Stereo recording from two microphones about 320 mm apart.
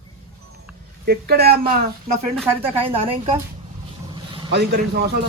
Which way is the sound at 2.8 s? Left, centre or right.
Centre.